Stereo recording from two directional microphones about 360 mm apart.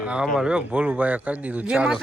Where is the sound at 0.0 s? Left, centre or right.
Centre.